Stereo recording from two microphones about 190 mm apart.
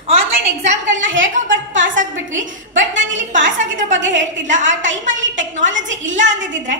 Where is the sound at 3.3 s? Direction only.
40° right (ahead or behind).